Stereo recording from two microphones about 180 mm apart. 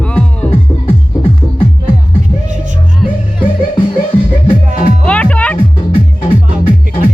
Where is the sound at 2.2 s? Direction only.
45° right (ahead or behind).